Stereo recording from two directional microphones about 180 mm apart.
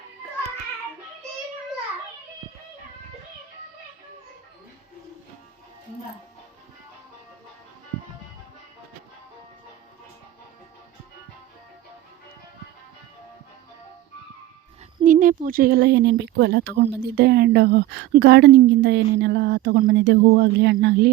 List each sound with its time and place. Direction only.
15.0 s speech: 45° right (ahead or behind); by 21.1 s 70° right (ahead or behind)